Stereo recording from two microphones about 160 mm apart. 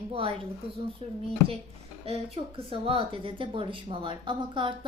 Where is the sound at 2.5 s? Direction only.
35° right (ahead or behind).